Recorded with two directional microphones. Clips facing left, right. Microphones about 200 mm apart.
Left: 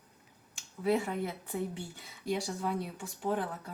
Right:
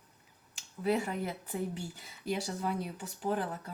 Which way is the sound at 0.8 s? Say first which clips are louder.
Left 1 dB; centre (ahead or behind).